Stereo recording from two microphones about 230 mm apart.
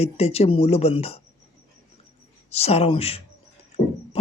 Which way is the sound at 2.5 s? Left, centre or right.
Left.